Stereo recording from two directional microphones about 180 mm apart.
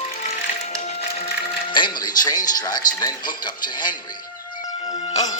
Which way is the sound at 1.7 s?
25° left (ahead or behind).